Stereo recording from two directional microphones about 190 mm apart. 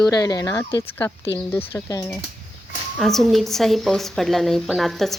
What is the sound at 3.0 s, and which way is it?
A woman's voice, centre (ahead or behind).